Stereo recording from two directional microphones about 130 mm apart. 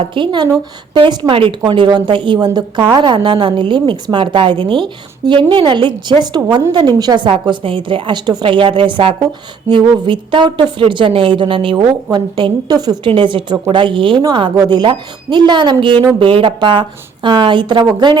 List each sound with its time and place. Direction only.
0.0 s a woman's voice: 40° right (ahead or behind)